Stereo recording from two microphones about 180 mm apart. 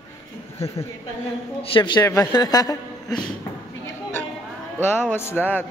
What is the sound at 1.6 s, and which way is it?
A man's voice, 30° left (ahead or behind).